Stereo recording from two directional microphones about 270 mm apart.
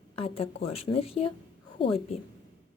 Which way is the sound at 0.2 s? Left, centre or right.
Left.